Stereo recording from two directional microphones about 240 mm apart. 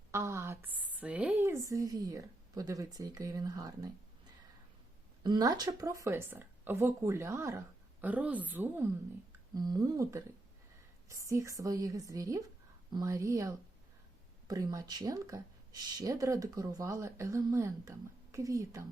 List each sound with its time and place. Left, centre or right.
0.1 s a woman's voice: centre
5.2 s speech: centre